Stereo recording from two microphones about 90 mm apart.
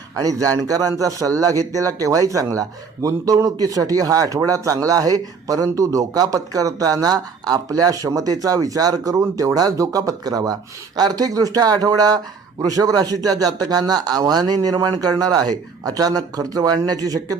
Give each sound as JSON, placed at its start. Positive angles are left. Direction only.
{"t": 0.2, "sound": "a man's voice", "side_deg": -40}